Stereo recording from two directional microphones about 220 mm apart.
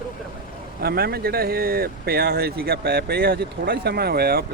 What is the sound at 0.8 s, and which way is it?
Speech, 45° right (ahead or behind).